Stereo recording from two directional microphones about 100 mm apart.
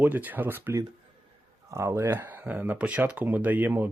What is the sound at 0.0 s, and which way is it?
Speech, 15° right (ahead or behind).